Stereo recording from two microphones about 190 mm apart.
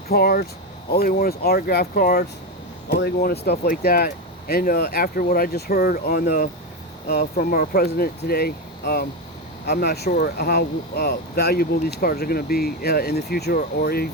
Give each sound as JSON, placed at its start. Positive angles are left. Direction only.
{"t": 0.1, "sound": "speech", "side_deg": 55}